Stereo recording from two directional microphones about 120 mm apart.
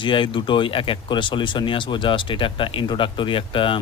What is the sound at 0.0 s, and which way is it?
Speech, 45° left (ahead or behind).